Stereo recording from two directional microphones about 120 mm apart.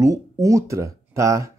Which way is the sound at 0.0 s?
30° right (ahead or behind).